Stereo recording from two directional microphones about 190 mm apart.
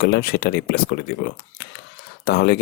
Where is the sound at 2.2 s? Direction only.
55° left (ahead or behind).